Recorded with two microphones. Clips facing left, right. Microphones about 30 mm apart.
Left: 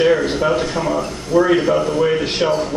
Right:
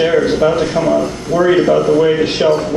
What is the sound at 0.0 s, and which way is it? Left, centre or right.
A man's voice, centre.